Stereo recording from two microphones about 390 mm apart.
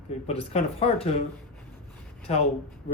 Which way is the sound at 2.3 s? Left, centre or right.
Centre.